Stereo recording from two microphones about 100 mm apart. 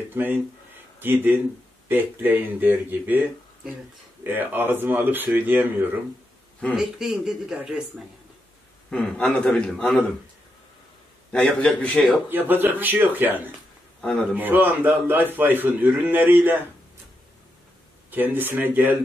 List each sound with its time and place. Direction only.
0.1 s a man's voice: 20° right (ahead or behind)
6.7 s speech: 5° right (ahead or behind)
8.9 s a man's voice: 10° left (ahead or behind)
11.3 s a man's voice: 10° left (ahead or behind)
12.3 s a man's voice: 20° right (ahead or behind)
18.1 s a man's voice: 20° right (ahead or behind)